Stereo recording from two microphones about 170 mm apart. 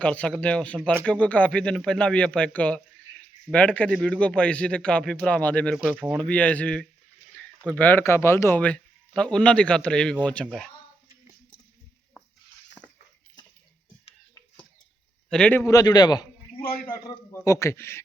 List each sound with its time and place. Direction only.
0.0 s a man's voice: 5° left (ahead or behind)
5.7 s a man's voice: 5° right (ahead or behind)
15.3 s a man's voice: 5° left (ahead or behind)
15.6 s a man's voice: 20° left (ahead or behind)